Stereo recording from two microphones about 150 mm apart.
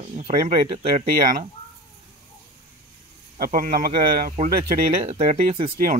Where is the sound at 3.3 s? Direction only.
70° right (ahead or behind).